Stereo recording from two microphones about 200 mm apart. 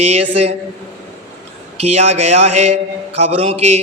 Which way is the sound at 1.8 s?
30° right (ahead or behind).